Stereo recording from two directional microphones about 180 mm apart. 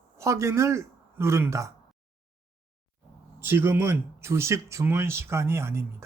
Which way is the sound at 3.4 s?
10° right (ahead or behind).